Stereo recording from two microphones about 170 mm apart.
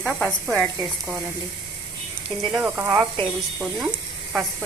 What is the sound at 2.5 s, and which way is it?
Speech, 10° right (ahead or behind).